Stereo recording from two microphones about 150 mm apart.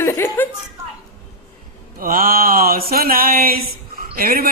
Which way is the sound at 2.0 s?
70° right (ahead or behind).